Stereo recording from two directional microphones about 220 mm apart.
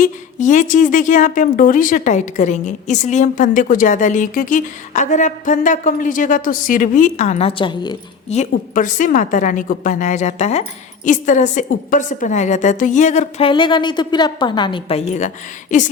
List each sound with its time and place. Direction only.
0.0 s a woman's voice: 35° left (ahead or behind)
8.4 s a woman's voice: 35° left (ahead or behind)